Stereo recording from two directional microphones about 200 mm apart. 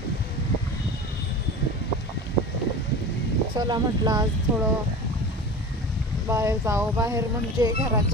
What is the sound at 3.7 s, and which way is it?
Speech, 20° right (ahead or behind).